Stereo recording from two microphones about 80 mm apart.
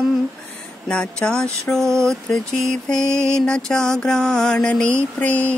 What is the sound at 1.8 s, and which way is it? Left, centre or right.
Mantra, right.